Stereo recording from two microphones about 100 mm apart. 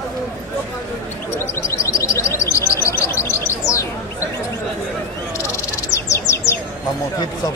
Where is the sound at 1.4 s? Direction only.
30° left (ahead or behind).